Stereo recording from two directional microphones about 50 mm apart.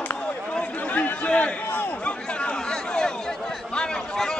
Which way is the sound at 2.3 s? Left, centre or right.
Centre.